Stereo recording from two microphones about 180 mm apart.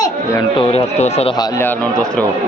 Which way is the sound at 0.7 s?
35° left (ahead or behind).